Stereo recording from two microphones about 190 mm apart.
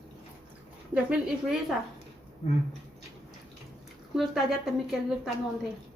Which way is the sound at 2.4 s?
35° left (ahead or behind).